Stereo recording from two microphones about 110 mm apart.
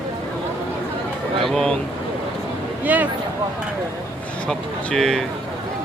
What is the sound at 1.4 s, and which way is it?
Speech, 5° left (ahead or behind).